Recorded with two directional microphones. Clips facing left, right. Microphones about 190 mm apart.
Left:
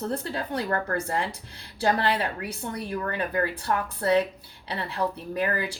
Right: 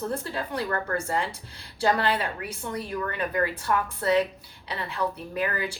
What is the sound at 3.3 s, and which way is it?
Speech, 30° left (ahead or behind).